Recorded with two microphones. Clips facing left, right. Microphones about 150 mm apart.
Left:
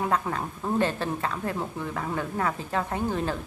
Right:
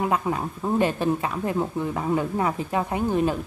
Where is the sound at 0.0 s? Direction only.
15° right (ahead or behind).